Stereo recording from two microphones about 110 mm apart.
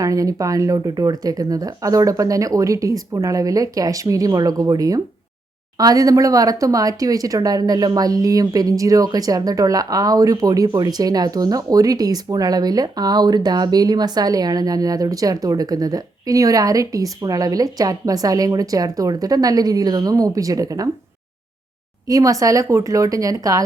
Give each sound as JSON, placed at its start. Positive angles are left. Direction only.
{"t": 0.0, "sound": "speech", "side_deg": -30}
{"t": 22.0, "sound": "speech", "side_deg": -30}